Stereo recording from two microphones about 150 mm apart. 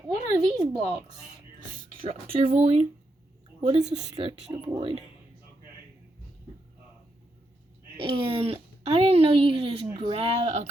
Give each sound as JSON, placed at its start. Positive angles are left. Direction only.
{"t": 0.1, "sound": "speech", "side_deg": -25}
{"t": 2.6, "sound": "a woman's voice", "side_deg": -45}
{"t": 4.1, "sound": "speech", "side_deg": -35}
{"t": 7.9, "sound": "speech", "side_deg": -35}